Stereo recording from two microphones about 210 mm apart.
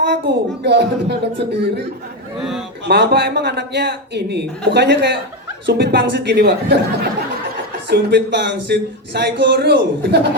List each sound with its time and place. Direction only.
0.0 s speech: 55° right (ahead or behind)
2.8 s a man's voice: 55° right (ahead or behind)